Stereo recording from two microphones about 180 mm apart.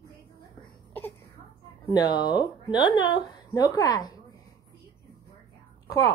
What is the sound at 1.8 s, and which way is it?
Speech, 20° left (ahead or behind).